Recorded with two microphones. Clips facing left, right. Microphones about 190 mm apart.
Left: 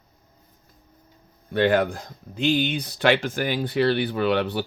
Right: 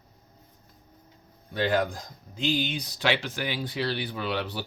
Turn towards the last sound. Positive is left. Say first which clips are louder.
# left 8 dB
turn(degrees=60)  # may be behind; listen again after turning